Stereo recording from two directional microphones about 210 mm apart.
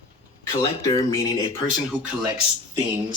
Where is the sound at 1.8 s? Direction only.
5° right (ahead or behind).